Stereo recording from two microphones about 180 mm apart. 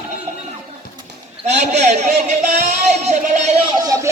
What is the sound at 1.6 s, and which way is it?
A man's voice, 40° right (ahead or behind).